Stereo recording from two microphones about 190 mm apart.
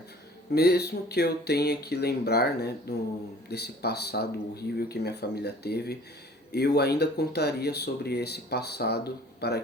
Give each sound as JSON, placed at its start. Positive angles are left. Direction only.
{"t": 0.5, "sound": "speech", "side_deg": 60}